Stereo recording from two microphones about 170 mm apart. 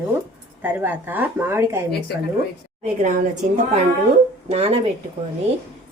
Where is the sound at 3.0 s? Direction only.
50° right (ahead or behind).